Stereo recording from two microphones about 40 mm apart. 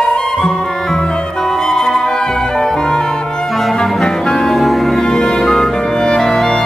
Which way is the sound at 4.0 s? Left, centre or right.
Centre.